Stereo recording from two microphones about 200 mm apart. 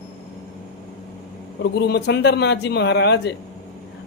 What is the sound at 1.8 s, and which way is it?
Speech, 55° left (ahead or behind).